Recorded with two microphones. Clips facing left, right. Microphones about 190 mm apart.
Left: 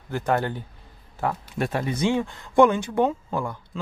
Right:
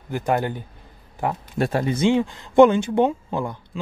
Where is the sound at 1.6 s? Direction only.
35° right (ahead or behind).